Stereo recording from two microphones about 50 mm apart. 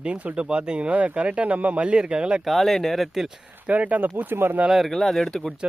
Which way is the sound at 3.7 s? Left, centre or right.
Right.